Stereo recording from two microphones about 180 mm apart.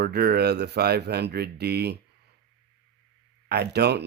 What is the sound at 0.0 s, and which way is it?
Speech, 65° right (ahead or behind).